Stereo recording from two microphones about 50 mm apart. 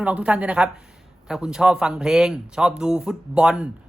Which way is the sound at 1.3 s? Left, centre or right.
Centre.